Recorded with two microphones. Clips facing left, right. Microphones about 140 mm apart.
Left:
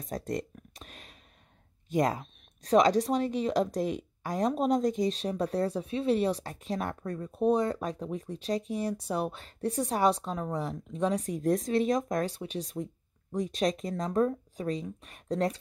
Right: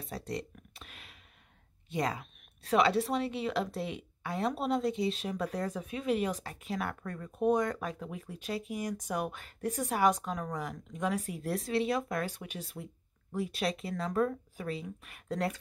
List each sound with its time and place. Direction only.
0.0 s a sound: 45° left (ahead or behind)
1.9 s a woman's voice: 45° left (ahead or behind)
7.0 s a woman's voice: 25° left (ahead or behind)